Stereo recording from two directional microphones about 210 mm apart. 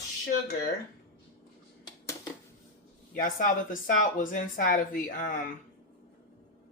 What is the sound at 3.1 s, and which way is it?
Speech, 40° left (ahead or behind).